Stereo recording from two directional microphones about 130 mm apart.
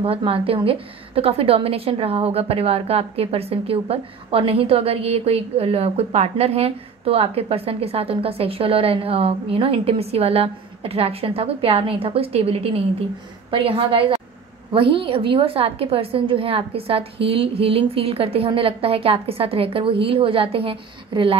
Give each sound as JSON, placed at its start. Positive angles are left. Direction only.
{"t": 0.0, "sound": "a woman's voice", "side_deg": -45}